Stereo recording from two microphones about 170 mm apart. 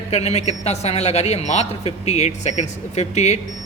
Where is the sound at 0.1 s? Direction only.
40° left (ahead or behind).